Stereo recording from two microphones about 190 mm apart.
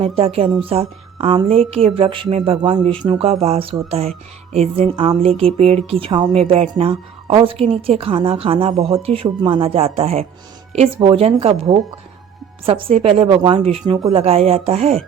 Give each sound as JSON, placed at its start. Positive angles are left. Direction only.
{"t": 0.0, "sound": "a woman's voice", "side_deg": -30}
{"t": 12.6, "sound": "a woman's voice", "side_deg": -30}